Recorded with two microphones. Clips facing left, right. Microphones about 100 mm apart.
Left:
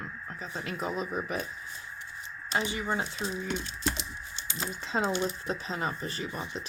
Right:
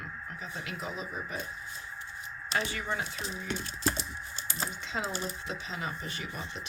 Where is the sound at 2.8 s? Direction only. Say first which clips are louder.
Left 3 dB; 30° left (ahead or behind).